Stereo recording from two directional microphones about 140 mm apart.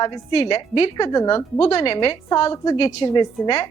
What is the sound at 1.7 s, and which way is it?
A woman's voice, 45° left (ahead or behind).